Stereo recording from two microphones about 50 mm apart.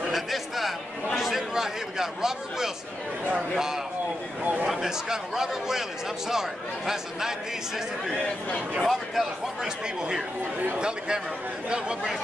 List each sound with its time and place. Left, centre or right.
0.0 s chatter: centre
1.1 s a sound: centre
3.5 s a man's voice: centre
4.4 s a man's voice: right
4.6 s a man's voice: centre
10.8 s a man's voice: centre